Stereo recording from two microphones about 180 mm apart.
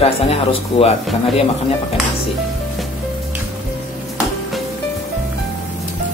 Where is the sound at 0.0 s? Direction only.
30° left (ahead or behind).